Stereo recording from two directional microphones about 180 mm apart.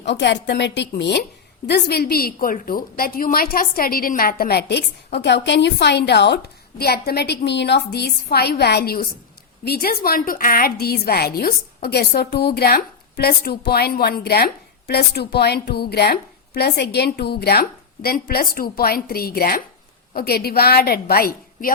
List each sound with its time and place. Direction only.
0.0 s a woman's voice: 70° left (ahead or behind); by 21.7 s 55° left (ahead or behind)